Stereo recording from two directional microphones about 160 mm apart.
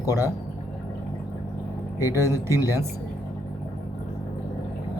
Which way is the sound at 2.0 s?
15° right (ahead or behind).